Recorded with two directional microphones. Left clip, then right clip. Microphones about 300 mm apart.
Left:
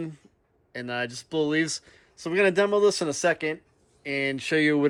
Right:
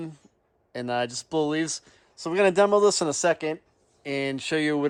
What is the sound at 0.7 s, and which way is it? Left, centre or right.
Speech, centre.